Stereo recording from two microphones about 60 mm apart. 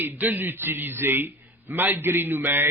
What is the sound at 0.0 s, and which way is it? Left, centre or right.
A man's voice, right.